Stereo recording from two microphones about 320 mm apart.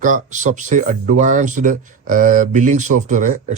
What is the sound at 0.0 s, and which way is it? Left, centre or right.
Speech, right.